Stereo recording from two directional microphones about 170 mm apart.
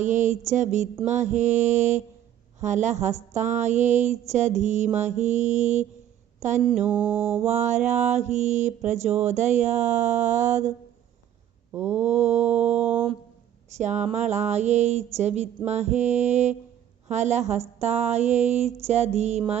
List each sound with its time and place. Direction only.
0.0 s mantra: 45° right (ahead or behind)
6.6 s speech: 30° right (ahead or behind)
6.8 s mantra: 10° right (ahead or behind)
7.4 s mantra: 45° right (ahead or behind)
11.7 s mantra: 10° right (ahead or behind)
11.9 s speech: 40° right (ahead or behind)